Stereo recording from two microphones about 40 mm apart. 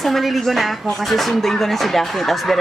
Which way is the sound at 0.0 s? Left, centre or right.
Centre.